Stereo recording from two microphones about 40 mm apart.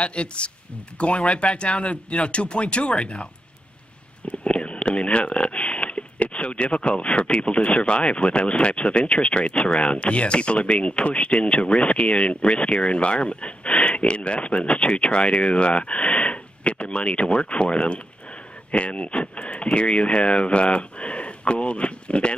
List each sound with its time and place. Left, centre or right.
0.0 s speech: left
4.3 s speech: left